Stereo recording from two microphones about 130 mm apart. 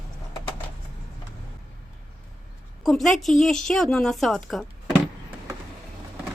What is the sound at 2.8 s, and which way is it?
Speech, centre (ahead or behind).